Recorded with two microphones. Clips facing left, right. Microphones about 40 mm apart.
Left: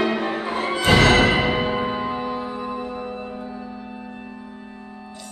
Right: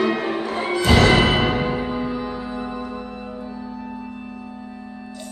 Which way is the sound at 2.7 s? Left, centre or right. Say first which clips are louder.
Left 1 dB; centre.